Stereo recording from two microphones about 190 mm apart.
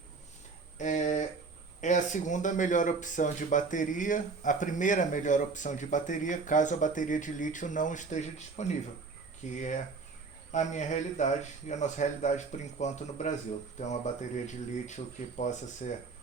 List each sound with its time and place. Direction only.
0.8 s speech: 40° left (ahead or behind)